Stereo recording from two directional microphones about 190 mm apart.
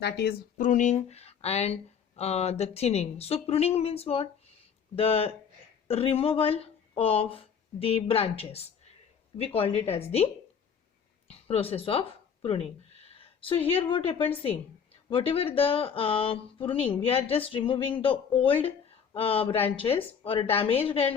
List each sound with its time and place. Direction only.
0.0 s speech: 60° left (ahead or behind)
0.5 s speech: 40° left (ahead or behind)
11.3 s a woman's voice: 30° left (ahead or behind)